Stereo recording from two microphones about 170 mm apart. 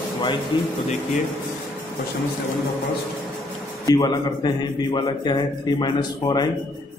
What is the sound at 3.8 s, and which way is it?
A man's voice, 25° left (ahead or behind).